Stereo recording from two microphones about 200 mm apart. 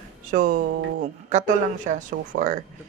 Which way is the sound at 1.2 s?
35° right (ahead or behind).